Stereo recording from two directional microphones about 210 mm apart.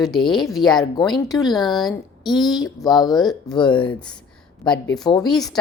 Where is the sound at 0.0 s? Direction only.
Centre (ahead or behind).